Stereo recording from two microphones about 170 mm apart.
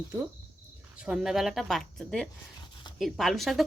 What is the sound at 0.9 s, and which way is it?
A woman's voice, 5° right (ahead or behind).